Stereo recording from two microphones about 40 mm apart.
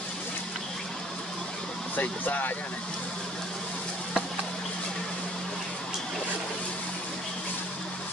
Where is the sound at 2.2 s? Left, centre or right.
Left.